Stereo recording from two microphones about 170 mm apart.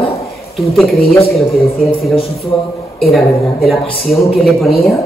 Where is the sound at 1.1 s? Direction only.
35° left (ahead or behind).